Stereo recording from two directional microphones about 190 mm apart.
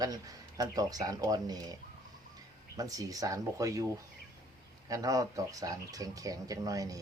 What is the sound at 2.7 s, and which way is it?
Speech, 20° right (ahead or behind).